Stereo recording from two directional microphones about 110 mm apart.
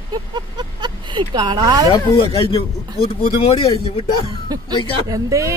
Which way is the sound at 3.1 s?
60° left (ahead or behind).